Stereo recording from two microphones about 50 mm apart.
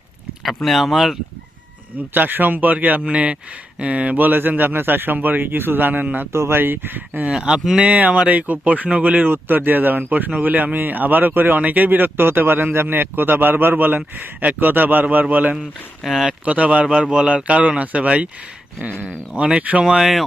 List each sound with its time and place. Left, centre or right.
0.4 s speech: centre
2.1 s speech: right
6.3 s speech: right
6.6 s speech: right
7.3 s speech: centre
7.8 s speech: right
9.3 s speech: right
16.0 s speech: centre
16.5 s speech: right
19.8 s speech: centre